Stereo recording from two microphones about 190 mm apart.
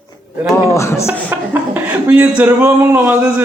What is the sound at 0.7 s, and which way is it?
Speech, 15° left (ahead or behind).